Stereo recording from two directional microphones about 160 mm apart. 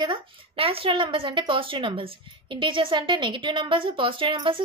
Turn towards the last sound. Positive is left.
turn(degrees=-30)  # may be behind; listen again after turning